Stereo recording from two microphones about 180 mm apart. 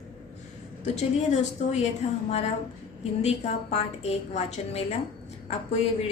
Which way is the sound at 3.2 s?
35° left (ahead or behind).